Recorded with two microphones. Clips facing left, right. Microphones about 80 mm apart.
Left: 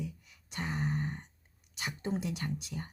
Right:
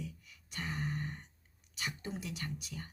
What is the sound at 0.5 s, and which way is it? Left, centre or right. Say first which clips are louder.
Speech: left 4 dB; left.